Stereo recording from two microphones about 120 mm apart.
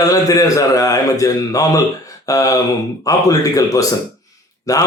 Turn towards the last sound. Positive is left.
turn(degrees=30)  # may be behind; listen again after turning